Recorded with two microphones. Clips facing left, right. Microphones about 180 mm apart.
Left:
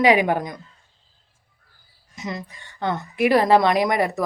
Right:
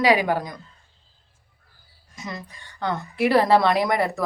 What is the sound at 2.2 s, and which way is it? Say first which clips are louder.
A woman's voice: left 4 dB; 20° left (ahead or behind).